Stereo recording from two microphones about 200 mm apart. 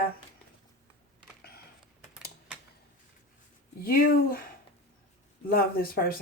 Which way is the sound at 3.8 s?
45° left (ahead or behind).